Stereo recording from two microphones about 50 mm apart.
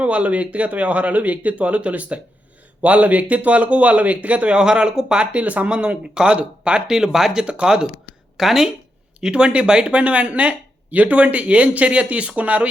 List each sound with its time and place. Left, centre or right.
0.0 s speech: right
6.8 s speech: centre
7.4 s speech: centre
9.2 s speech: centre